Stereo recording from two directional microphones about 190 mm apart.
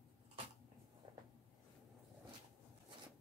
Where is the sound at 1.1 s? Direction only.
25° right (ahead or behind).